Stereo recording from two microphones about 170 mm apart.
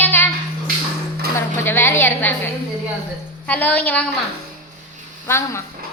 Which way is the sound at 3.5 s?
10° left (ahead or behind).